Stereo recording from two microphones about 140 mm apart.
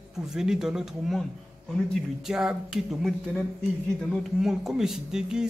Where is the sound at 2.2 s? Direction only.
5° right (ahead or behind).